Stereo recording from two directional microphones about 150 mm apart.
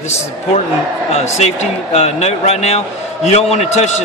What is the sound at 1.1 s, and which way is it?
Speech, 50° left (ahead or behind).